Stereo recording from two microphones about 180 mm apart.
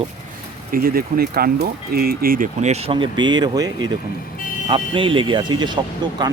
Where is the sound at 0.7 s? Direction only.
55° right (ahead or behind).